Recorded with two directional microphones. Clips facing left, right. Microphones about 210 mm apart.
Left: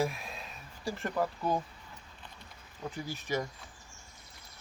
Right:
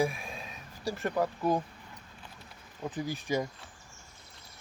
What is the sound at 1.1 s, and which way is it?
Speech, 10° right (ahead or behind).